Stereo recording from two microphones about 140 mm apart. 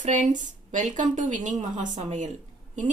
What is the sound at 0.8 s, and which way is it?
Speech, 65° right (ahead or behind).